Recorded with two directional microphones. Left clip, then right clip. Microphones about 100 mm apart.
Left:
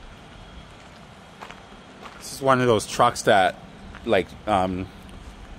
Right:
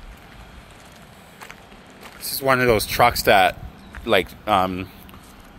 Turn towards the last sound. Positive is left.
turn(degrees=0)  # may be behind; listen again after turning